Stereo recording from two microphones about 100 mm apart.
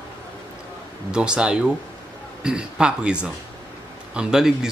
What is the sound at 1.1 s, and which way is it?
Speech, 10° right (ahead or behind).